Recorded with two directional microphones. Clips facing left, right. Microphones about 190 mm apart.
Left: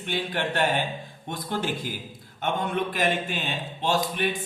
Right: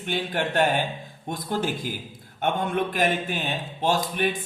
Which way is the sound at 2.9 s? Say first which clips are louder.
Right 2 dB; 45° right (ahead or behind).